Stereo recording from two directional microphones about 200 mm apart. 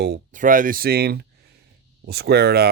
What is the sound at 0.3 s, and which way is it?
Speech, 40° right (ahead or behind).